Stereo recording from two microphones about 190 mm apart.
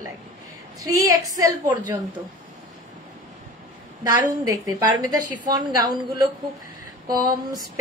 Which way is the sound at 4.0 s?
15° right (ahead or behind).